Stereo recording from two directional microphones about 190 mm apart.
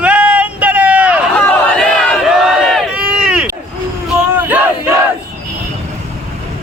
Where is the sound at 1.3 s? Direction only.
5° left (ahead or behind).